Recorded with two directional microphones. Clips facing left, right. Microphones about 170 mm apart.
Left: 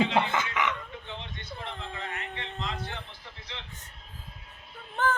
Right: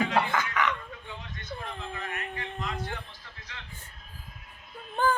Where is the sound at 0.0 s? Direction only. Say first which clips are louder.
Left 1 dB; 25° left (ahead or behind).